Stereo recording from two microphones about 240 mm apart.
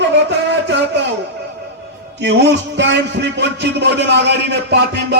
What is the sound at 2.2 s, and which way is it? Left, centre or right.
A man's voice, right.